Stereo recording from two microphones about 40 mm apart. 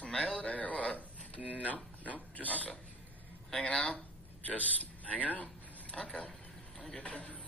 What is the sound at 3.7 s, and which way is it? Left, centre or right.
Speech, left.